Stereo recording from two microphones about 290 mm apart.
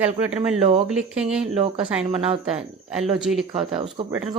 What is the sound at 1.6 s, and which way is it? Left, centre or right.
Speech, centre.